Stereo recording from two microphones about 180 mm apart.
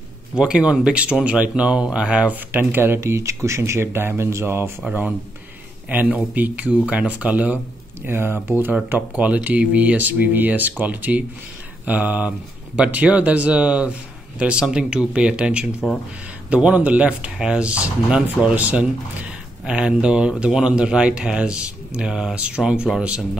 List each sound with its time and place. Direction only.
0.4 s speech: 5° right (ahead or behind)